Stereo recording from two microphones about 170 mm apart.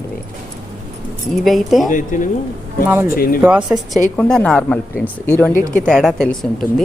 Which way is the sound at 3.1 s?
60° left (ahead or behind).